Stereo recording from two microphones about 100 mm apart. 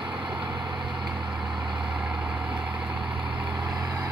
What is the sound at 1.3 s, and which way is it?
Vehicle, 5° right (ahead or behind).